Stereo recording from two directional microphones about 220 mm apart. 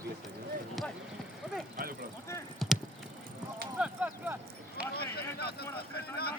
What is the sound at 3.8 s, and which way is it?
Speech, 5° right (ahead or behind).